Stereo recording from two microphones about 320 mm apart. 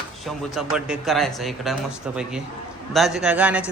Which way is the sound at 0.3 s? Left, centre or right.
Centre.